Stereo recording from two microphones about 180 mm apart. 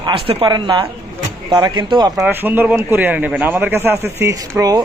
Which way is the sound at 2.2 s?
10° right (ahead or behind).